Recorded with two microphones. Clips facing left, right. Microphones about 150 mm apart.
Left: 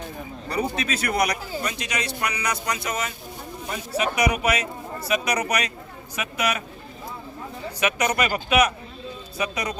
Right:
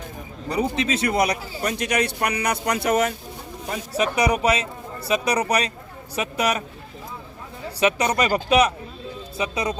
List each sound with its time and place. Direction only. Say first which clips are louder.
0.4 s speech: right 3 dB; 20° right (ahead or behind)
1.6 s a man's voice: right 10 dB; 55° right (ahead or behind)
3.9 s speech: right 2 dB; 35° right (ahead or behind)
7.8 s speech: right 3 dB; 30° right (ahead or behind)